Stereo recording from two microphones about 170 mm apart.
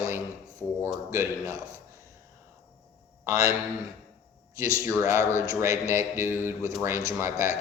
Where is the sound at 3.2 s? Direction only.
20° right (ahead or behind).